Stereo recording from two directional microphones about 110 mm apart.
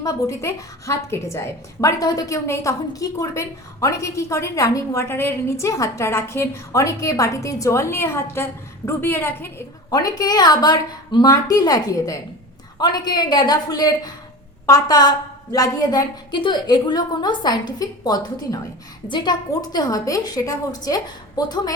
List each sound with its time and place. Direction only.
0.0 s a woman's voice: 25° left (ahead or behind)
9.9 s a woman's voice: 35° left (ahead or behind)